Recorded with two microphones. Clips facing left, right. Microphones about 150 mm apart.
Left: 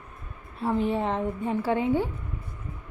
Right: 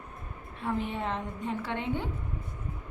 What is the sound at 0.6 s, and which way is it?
A woman's voice, 35° left (ahead or behind).